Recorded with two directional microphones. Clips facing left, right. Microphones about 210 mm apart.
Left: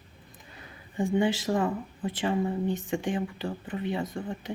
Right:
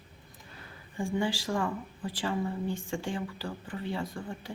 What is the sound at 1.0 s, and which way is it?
Speech, 20° left (ahead or behind).